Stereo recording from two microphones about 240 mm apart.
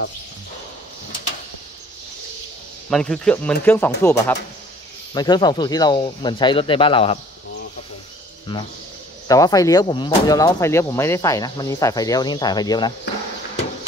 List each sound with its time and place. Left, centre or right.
2.9 s speech: centre; by 7.2 s left
8.5 s speech: left